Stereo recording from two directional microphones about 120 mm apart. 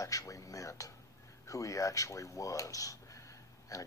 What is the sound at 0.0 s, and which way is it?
Speech, 30° left (ahead or behind).